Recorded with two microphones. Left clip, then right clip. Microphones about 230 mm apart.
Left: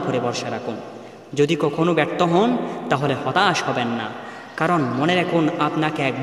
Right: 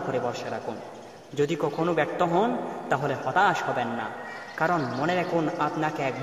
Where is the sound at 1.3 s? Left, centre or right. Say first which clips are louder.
Left 7 dB; left.